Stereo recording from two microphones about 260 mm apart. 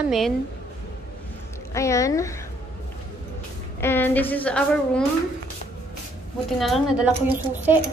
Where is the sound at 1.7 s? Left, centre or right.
Centre.